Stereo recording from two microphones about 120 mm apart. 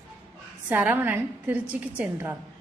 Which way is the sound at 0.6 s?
15° right (ahead or behind).